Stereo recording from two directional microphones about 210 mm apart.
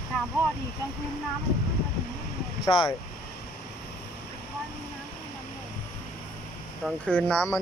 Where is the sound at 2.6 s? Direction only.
25° left (ahead or behind).